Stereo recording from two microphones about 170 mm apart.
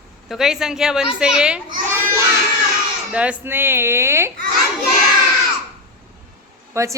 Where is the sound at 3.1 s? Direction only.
5° right (ahead or behind).